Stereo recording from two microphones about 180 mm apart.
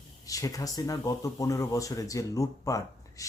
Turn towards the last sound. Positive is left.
turn(degrees=20)  # may be behind; listen again after turning